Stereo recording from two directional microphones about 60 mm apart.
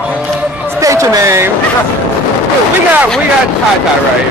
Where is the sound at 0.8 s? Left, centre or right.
Right.